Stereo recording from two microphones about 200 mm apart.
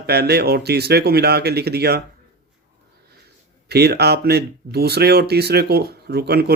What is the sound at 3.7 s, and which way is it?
Speech, 55° right (ahead or behind).